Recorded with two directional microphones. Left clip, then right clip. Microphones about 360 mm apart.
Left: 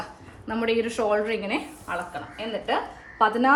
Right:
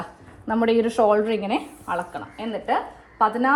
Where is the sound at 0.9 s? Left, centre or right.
Centre.